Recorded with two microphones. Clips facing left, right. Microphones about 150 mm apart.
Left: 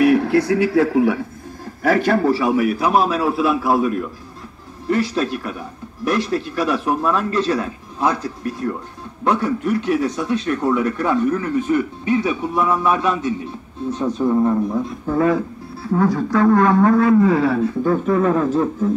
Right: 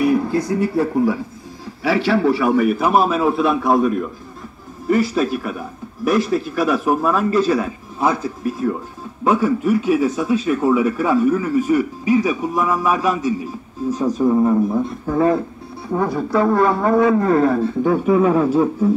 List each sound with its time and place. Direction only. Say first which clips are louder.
0.0 s a man's voice: left 3 dB; 75° left (ahead or behind)
1.8 s a man's voice: left 1 dB; 50° left (ahead or behind)
2.4 s speech: right 1 dB; 5° left (ahead or behind)
15.1 s speech: right 1 dB; 30° right (ahead or behind)
15.8 s speech: left 2 dB; 15° right (ahead or behind)
17.1 s speech: left 1 dB; 50° right (ahead or behind)
17.8 s speech: right 3 dB; 10° right (ahead or behind)